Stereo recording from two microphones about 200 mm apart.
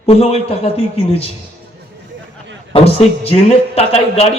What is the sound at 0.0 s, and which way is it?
A man's voice, 30° left (ahead or behind).